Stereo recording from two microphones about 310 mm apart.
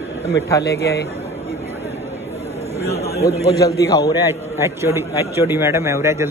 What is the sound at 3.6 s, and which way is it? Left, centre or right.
Speech, centre.